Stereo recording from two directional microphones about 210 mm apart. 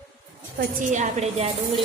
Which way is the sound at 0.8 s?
35° right (ahead or behind).